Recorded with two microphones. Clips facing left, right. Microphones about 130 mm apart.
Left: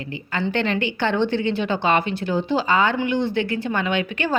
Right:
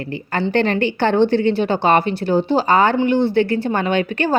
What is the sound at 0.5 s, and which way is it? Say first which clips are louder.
A woman's voice: right 7 dB; 40° right (ahead or behind).